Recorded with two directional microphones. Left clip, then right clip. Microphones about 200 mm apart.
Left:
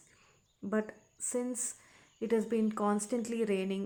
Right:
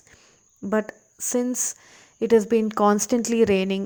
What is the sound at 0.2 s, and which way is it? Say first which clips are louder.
Speech: right 9 dB; 35° right (ahead or behind).